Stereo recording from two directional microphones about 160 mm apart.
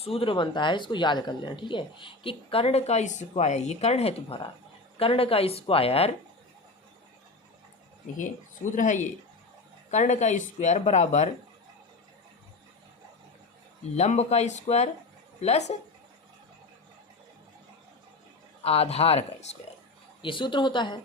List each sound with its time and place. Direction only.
0.0 s speech: 35° left (ahead or behind)
8.7 s speech: 50° left (ahead or behind)
13.9 s speech: 45° left (ahead or behind)
18.6 s speech: 40° left (ahead or behind)
20.2 s speech: 30° left (ahead or behind)